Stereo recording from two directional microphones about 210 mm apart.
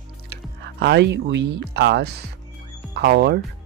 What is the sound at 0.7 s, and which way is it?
Speech, 55° right (ahead or behind).